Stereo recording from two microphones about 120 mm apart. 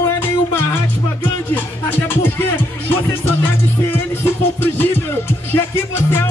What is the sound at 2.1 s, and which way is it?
Music, 15° left (ahead or behind).